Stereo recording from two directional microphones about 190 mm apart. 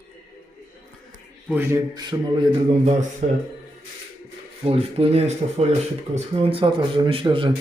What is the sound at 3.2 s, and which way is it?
Speech, 40° right (ahead or behind).